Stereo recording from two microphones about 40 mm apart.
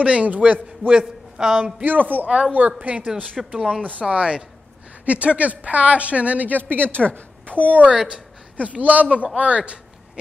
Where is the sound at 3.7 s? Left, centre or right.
Right.